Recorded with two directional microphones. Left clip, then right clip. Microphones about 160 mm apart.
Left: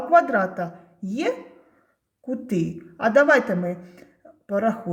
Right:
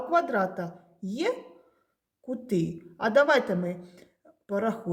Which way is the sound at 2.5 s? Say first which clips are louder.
Even; 20° right (ahead or behind).